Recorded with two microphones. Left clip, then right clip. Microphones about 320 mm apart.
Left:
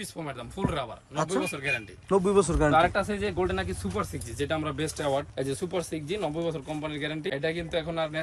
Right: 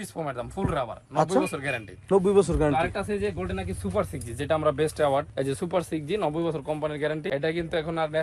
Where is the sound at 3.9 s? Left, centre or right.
Centre.